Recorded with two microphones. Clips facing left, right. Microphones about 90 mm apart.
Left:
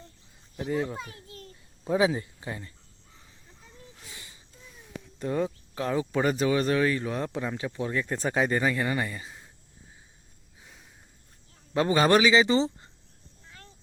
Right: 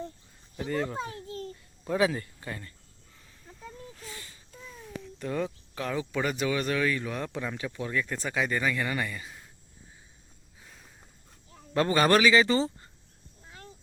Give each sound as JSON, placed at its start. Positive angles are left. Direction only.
{"t": 0.5, "sound": "speech", "side_deg": 5}
{"t": 0.9, "sound": "babbling", "side_deg": -30}
{"t": 1.8, "sound": "speech", "side_deg": 15}
{"t": 4.1, "sound": "a sound", "side_deg": 15}
{"t": 5.2, "sound": "speech", "side_deg": 25}
{"t": 11.7, "sound": "speech", "side_deg": 15}
{"t": 13.5, "sound": "a sound", "side_deg": -20}